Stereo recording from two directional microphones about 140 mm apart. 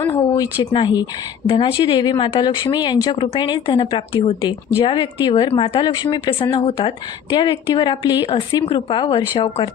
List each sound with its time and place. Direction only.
0.0 s a woman's voice: 20° left (ahead or behind)
1.5 s a woman's voice: 40° left (ahead or behind)
8.3 s a woman's voice: 40° left (ahead or behind)